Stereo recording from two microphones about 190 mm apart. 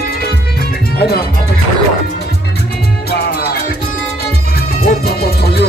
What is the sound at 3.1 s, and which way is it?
Music, 55° left (ahead or behind).